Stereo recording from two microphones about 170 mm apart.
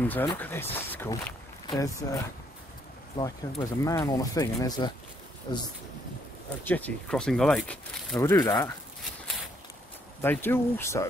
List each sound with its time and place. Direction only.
0.0 s speech: 10° left (ahead or behind)
3.2 s speech: 25° left (ahead or behind)
6.6 s speech: 10° left (ahead or behind)
8.2 s speech: 20° left (ahead or behind)
10.2 s speech: 10° left (ahead or behind)